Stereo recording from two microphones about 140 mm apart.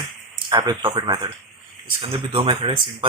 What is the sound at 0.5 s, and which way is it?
Speech, 25° right (ahead or behind).